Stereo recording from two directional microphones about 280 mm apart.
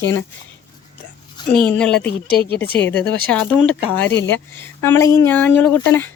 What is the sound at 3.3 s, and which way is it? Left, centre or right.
Speech, centre.